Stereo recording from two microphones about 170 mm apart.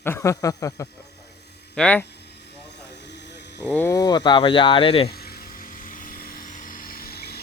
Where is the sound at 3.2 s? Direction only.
90° left.